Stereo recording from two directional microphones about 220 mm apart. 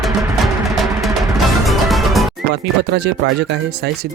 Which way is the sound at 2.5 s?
50° right (ahead or behind).